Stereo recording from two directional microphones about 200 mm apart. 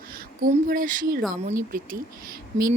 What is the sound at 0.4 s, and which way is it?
Speech, 45° right (ahead or behind).